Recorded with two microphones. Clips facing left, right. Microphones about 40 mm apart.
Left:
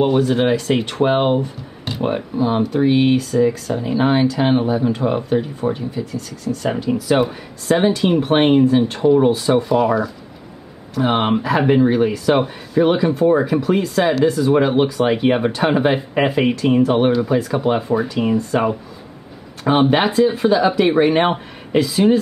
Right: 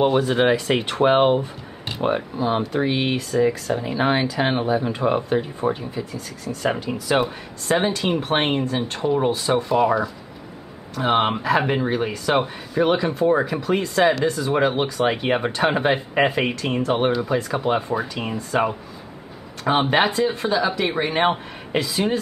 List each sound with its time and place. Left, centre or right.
0.0 s speech: centre